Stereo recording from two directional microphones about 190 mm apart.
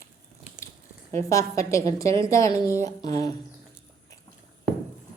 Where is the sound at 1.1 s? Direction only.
15° left (ahead or behind).